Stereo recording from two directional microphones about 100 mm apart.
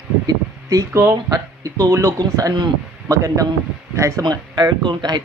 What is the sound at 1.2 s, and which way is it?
A man's voice, 35° right (ahead or behind).